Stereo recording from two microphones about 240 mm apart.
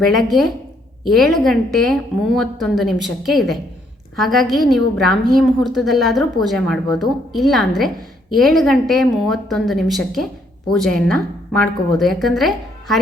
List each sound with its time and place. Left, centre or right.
0.0 s a woman's voice: centre